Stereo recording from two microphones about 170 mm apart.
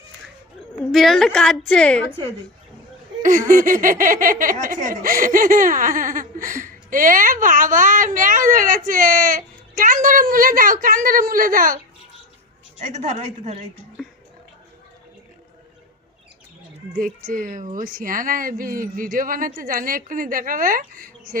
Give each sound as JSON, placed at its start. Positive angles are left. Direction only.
{"t": 0.8, "sound": "a woman's voice", "side_deg": 0}
{"t": 3.2, "sound": "speech", "side_deg": -50}
{"t": 12.8, "sound": "a woman's voice", "side_deg": -45}
{"t": 16.9, "sound": "speech", "side_deg": -55}